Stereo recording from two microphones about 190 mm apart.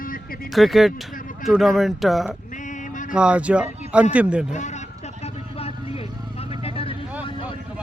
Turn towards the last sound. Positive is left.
turn(degrees=30)  # may be behind; listen again after turning